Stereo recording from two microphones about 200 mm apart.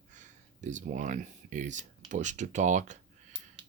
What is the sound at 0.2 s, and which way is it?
Speech, 40° right (ahead or behind).